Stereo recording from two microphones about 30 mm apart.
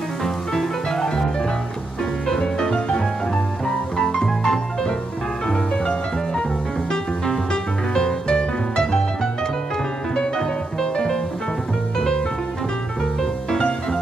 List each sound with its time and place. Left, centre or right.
0.9 s music: left
7.9 s music: left
10.1 s music: left